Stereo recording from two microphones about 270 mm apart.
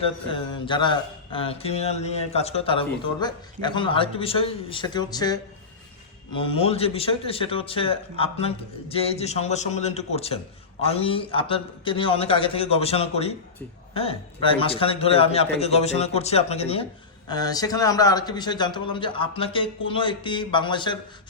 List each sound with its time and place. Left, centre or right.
0.0 s a man's voice: centre